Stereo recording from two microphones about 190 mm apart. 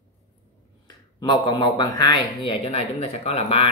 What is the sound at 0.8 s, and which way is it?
Speech, 20° left (ahead or behind).